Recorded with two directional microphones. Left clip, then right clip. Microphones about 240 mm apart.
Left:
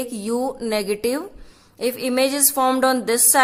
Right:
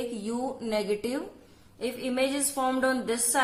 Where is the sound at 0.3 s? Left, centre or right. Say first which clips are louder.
Left 11 dB; left.